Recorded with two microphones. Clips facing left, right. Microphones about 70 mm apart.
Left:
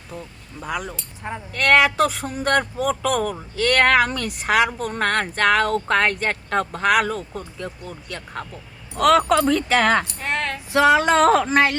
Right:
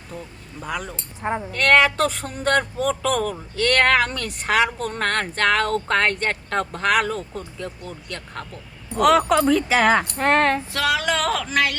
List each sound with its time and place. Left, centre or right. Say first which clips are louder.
0.1 s speech: even; centre
0.9 s speech: right 6 dB; right
1.5 s speech: left 1 dB; centre
10.2 s speech: right 8 dB; right
10.7 s a sound: left 6 dB; left